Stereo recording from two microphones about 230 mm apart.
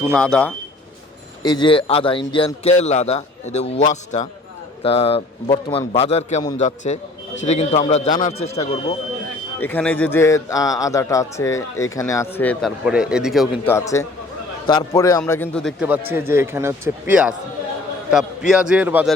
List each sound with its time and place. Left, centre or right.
0.2 s a man's voice: centre
1.4 s a man's voice: centre
9.6 s a man's voice: centre
12.8 s a man's voice: centre
13.7 s a man's voice: centre